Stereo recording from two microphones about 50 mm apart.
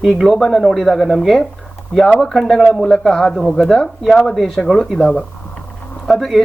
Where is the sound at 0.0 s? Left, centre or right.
Centre.